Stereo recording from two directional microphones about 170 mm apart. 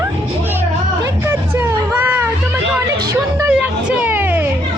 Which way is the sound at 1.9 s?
10° right (ahead or behind).